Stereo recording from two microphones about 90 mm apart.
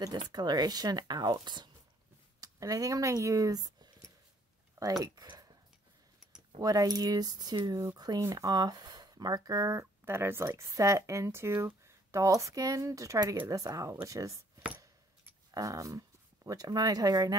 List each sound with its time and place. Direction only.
0.3 s speech: 50° right (ahead or behind)
2.4 s speech: 40° right (ahead or behind)
6.6 s speech: 45° right (ahead or behind)
15.5 s speech: 40° right (ahead or behind)